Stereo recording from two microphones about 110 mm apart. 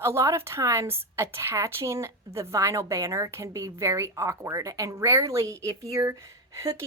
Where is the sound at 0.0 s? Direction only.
25° right (ahead or behind).